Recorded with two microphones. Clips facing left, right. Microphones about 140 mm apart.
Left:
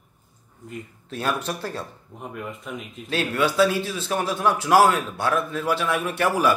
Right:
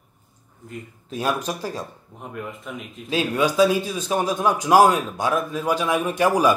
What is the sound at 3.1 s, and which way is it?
A man's voice, 15° right (ahead or behind).